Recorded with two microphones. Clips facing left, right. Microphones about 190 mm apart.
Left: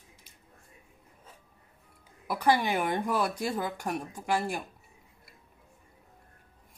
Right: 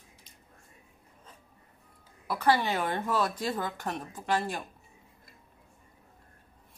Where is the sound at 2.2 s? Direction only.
15° left (ahead or behind).